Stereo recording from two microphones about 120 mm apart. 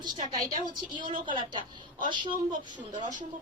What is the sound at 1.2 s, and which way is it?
Speech, 40° right (ahead or behind).